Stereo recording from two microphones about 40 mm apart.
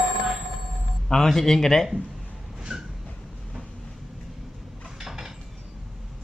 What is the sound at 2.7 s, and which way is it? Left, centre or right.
Vehicle, centre.